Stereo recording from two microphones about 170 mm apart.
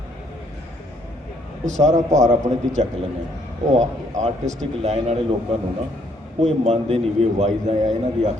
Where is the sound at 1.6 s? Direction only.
40° right (ahead or behind).